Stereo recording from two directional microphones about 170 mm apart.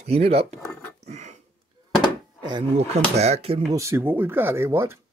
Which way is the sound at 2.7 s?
40° right (ahead or behind).